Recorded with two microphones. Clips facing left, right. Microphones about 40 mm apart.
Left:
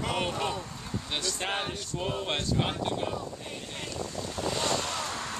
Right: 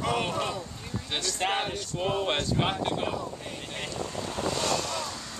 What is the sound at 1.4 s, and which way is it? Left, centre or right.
Speech, centre.